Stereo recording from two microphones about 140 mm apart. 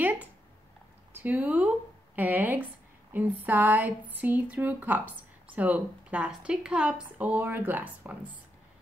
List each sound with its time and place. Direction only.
0.0 s a woman's voice: 10° right (ahead or behind)